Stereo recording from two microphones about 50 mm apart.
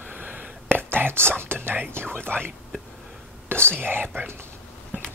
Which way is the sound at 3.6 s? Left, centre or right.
Right.